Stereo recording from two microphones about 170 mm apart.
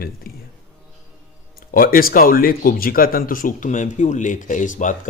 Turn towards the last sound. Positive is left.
turn(degrees=50)  # may be behind; listen again after turning